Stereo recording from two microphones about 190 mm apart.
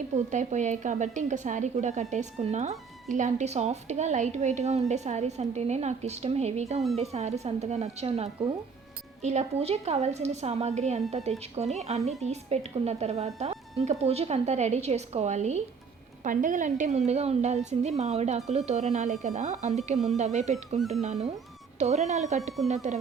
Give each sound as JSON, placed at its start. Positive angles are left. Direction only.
{"t": 0.1, "sound": "a woman's voice", "side_deg": -40}
{"t": 20.7, "sound": "speech", "side_deg": 0}
{"t": 21.0, "sound": "a woman's voice", "side_deg": -35}